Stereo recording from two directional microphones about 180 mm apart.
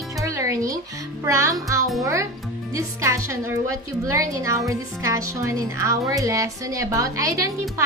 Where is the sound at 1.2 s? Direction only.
15° right (ahead or behind).